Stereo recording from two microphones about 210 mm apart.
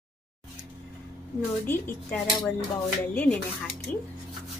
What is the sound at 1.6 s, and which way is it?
Speech, 10° left (ahead or behind).